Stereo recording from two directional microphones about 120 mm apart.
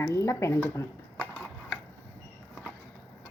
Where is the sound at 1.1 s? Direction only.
10° left (ahead or behind).